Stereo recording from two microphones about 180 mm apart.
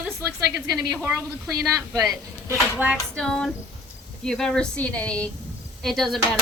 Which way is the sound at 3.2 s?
5° left (ahead or behind).